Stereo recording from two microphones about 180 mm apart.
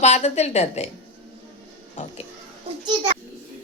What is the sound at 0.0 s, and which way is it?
Speech, 40° left (ahead or behind).